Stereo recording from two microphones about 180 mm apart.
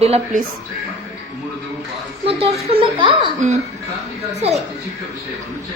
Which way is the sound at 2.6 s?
25° right (ahead or behind).